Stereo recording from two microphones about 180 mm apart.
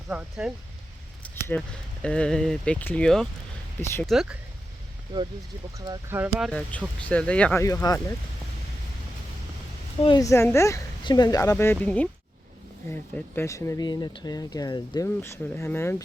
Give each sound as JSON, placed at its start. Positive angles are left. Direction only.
{"t": 0.1, "sound": "speech", "side_deg": -5}
{"t": 1.2, "sound": "speech", "side_deg": 5}
{"t": 5.7, "sound": "speech", "side_deg": -20}
{"t": 6.1, "sound": "speech", "side_deg": -10}
{"t": 6.5, "sound": "speech", "side_deg": 5}
{"t": 7.6, "sound": "speech", "side_deg": 20}
{"t": 10.0, "sound": "speech", "side_deg": 25}